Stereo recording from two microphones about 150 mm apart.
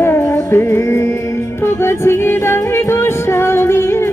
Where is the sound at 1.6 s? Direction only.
15° left (ahead or behind).